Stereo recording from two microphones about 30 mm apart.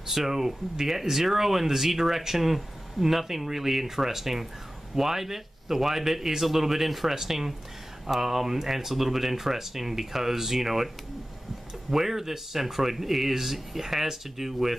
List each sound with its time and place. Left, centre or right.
0.0 s speech: centre
11.9 s speech: centre